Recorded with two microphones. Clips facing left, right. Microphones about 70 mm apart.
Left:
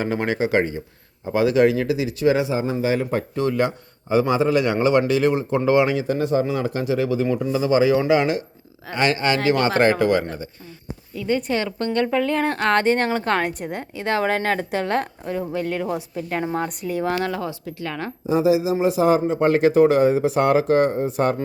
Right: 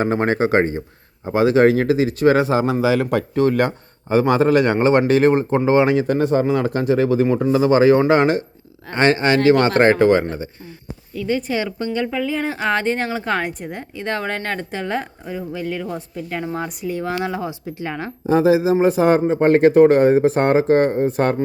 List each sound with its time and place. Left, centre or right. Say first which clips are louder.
0.0 s speech: right 4 dB; right
2.5 s a man's voice: right 4 dB; right
3.5 s a man's voice: right 3 dB; right
9.0 s speech: right 4 dB; right
11.1 s a woman's voice: right 1 dB; centre
11.5 s speech: right 1 dB; centre
11.9 s a woman's voice: left 3 dB; centre
17.2 s speech: right 1 dB; centre
18.3 s a man's voice: right 4 dB; right